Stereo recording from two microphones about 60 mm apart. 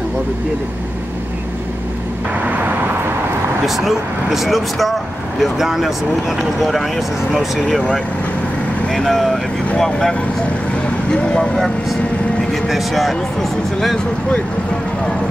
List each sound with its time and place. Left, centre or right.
2.4 s vehicle: right
3.6 s speech: centre
8.9 s speech: centre
12.6 s speech: centre